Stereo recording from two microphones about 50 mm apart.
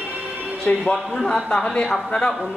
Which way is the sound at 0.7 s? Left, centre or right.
Left.